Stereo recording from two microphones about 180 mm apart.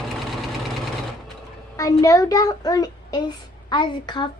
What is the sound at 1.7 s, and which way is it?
A child's voice, 20° left (ahead or behind).